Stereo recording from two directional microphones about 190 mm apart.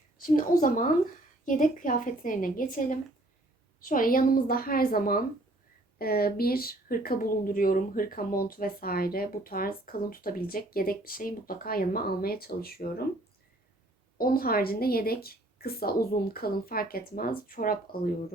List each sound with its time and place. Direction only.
0.2 s speech: 45° left (ahead or behind)
14.2 s speech: 50° left (ahead or behind)